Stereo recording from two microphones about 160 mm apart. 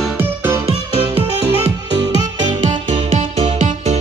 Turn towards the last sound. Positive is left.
turn(degrees=-50)  # may be behind; listen again after turning